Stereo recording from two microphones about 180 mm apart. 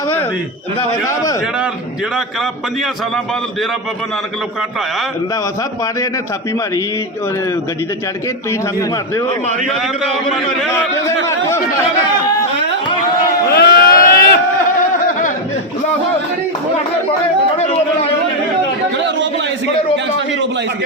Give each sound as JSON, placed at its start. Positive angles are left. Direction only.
{"t": 1.0, "sound": "a man's voice", "side_deg": 20}
{"t": 10.7, "sound": "a man's voice", "side_deg": 15}
{"t": 13.5, "sound": "crowd", "side_deg": 60}
{"t": 17.6, "sound": "a sound", "side_deg": 35}